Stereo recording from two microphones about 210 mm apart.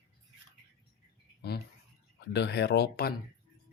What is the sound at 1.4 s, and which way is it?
Speech, 50° left (ahead or behind).